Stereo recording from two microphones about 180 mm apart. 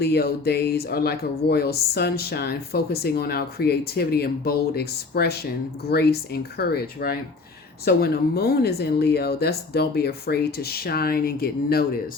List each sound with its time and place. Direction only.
0.0 s speech: 60° left (ahead or behind)